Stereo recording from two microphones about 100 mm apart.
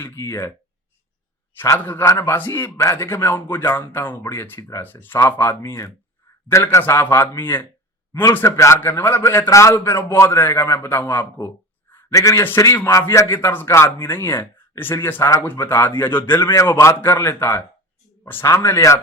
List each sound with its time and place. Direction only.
0.0 s a man's voice: 25° left (ahead or behind)
1.8 s a man's voice: 20° left (ahead or behind)